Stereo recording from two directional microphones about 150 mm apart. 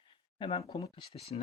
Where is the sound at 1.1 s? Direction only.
40° left (ahead or behind).